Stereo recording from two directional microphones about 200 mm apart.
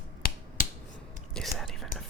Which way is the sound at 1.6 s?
Centre (ahead or behind).